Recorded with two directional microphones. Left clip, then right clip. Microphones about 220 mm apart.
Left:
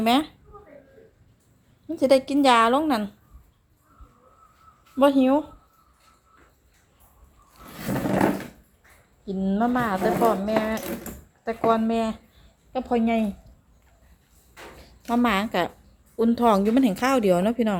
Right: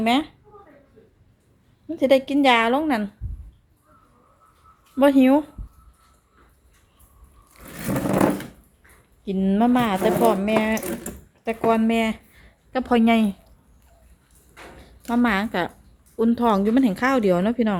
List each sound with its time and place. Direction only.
0.0 s a woman's voice: centre (ahead or behind)
2.0 s a woman's voice: 5° right (ahead or behind)
4.9 s speech: 15° right (ahead or behind)
7.9 s a sound: 30° right (ahead or behind)
9.2 s speech: 20° right (ahead or behind)
15.1 s a woman's voice: 5° right (ahead or behind)